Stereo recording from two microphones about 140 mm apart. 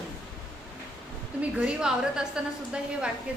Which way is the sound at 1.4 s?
5° right (ahead or behind).